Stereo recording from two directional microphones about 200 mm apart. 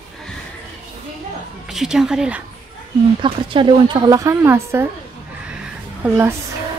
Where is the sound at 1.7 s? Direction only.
Centre (ahead or behind).